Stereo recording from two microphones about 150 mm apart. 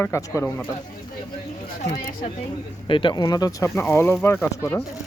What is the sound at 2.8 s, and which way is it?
Speech, 35° left (ahead or behind).